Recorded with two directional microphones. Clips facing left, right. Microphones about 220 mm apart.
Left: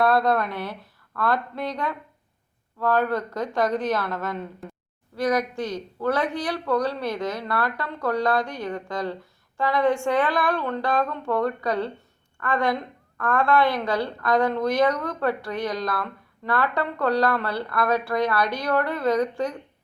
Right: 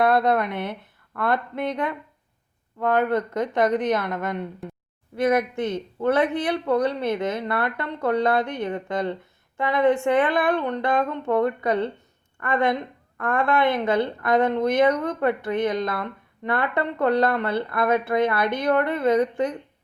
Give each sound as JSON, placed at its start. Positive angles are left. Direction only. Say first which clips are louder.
{"t": 0.0, "sound": "a woman's voice", "louder": "right 1 dB", "side_deg": -20}